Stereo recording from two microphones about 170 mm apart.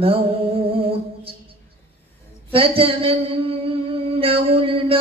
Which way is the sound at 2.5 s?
35° right (ahead or behind).